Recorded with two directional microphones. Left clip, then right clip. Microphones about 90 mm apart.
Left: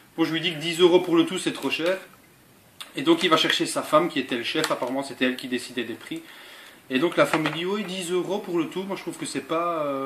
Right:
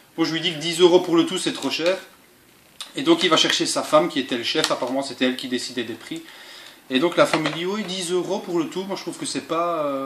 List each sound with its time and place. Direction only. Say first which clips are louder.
0.2 s speech: right 2 dB; 5° right (ahead or behind)
3.0 s speech: right 3 dB; 5° right (ahead or behind)